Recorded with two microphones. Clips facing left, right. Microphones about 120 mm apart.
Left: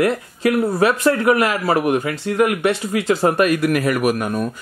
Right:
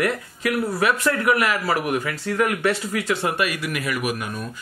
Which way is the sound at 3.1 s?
35° left (ahead or behind).